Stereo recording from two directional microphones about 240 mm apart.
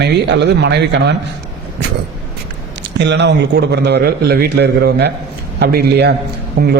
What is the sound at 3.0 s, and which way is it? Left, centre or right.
A man's voice, right.